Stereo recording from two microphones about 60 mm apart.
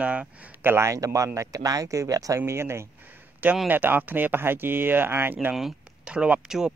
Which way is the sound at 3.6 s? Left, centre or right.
Right.